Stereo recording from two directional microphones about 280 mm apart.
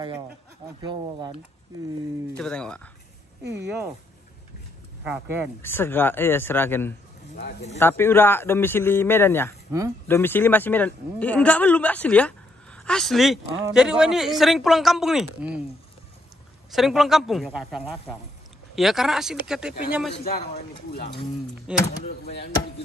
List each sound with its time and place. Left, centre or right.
0.8 s speech: centre
2.3 s a man's voice: centre
5.0 s speech: centre
5.6 s a man's voice: centre
9.7 s speech: centre
10.0 s a man's voice: centre
16.7 s a man's voice: centre
20.2 s a man's voice: left
21.7 s a man's voice: centre
22.2 s speech: left